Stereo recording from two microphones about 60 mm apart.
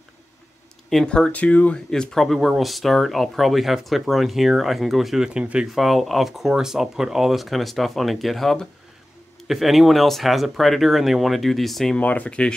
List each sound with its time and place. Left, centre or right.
1.0 s speech: centre
1.9 s speech: centre
5.3 s speech: centre
5.8 s speech: centre
12.0 s speech: left